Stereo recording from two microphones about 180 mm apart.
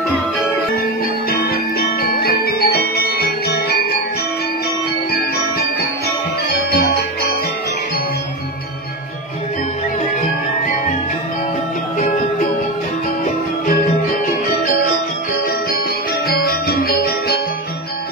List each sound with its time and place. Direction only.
1.3 s music: 60° left (ahead or behind)
16.3 s music: 60° left (ahead or behind)